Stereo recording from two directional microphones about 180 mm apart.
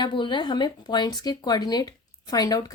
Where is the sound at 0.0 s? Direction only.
25° left (ahead or behind).